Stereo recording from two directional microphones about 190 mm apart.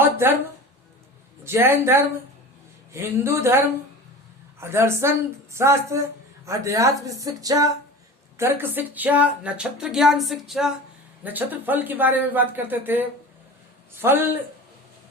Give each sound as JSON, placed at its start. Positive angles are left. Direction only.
{"t": 0.0, "sound": "a sound", "side_deg": -10}
{"t": 1.5, "sound": "a woman's voice", "side_deg": -10}
{"t": 4.6, "sound": "a woman's voice", "side_deg": -15}